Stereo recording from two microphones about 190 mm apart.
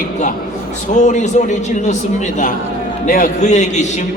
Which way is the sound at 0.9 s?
40° left (ahead or behind).